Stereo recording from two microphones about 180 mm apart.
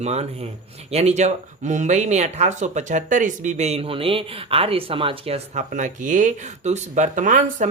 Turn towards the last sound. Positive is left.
turn(degrees=-45)  # may be behind; listen again after turning